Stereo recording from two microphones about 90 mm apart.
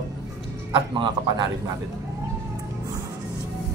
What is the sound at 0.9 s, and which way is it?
Speech, 60° right (ahead or behind).